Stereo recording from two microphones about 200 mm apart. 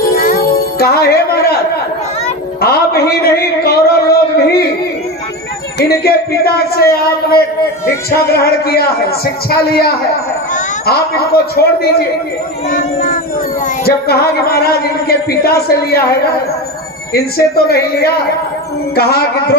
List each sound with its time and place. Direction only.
0.2 s music: 45° left (ahead or behind)
2.6 s speech: 50° left (ahead or behind)
6.0 s speech: 50° left (ahead or behind)
12.7 s child singing: 40° left (ahead or behind)
13.8 s speech: 50° left (ahead or behind)
17.3 s speech: 50° left (ahead or behind)